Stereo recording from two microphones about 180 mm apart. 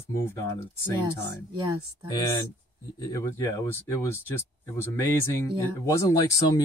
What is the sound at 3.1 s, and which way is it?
Speech, 15° left (ahead or behind).